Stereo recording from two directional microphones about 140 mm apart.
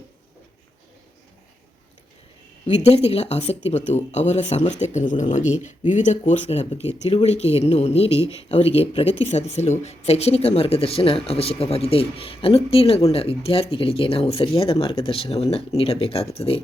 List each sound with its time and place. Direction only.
2.6 s speech: 50° left (ahead or behind)